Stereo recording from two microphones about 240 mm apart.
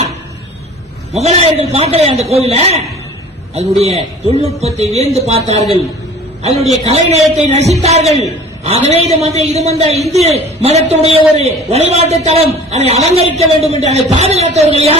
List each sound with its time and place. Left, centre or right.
1.1 s a man's voice: right